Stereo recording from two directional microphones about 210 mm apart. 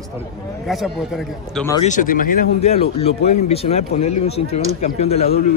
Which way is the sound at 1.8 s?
40° left (ahead or behind).